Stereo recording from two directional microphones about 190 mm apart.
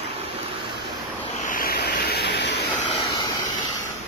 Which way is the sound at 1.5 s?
50° left (ahead or behind).